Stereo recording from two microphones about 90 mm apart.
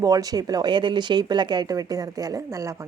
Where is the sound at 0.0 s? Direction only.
40° right (ahead or behind).